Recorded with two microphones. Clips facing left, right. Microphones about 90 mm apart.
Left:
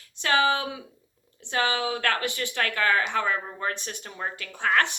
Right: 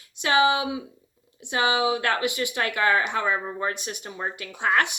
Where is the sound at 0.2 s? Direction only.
15° right (ahead or behind).